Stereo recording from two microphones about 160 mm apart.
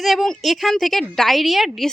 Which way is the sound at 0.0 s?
Centre (ahead or behind).